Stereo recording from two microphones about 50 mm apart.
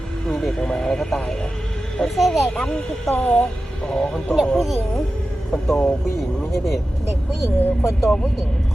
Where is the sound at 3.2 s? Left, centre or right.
Left.